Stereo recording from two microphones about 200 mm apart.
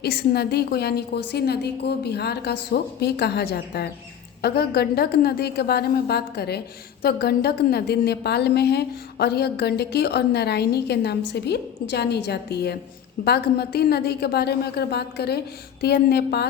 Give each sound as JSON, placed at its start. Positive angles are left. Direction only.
{"t": 0.0, "sound": "a woman's voice", "side_deg": 55}